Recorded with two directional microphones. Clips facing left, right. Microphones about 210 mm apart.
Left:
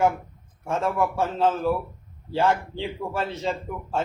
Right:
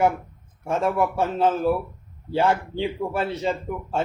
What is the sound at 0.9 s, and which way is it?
A man's voice, 15° right (ahead or behind).